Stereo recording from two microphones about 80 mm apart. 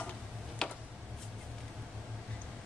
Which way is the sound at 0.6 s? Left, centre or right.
Centre.